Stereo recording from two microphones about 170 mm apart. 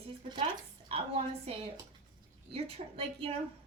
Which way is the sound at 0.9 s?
35° right (ahead or behind).